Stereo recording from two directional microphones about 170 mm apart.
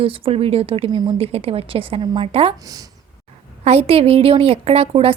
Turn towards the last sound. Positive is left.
turn(degrees=-35)  # may be behind; listen again after turning